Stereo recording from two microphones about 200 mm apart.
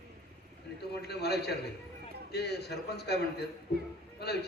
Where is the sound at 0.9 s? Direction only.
55° left (ahead or behind).